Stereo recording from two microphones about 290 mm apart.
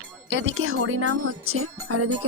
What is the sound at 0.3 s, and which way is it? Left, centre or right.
Speech, right.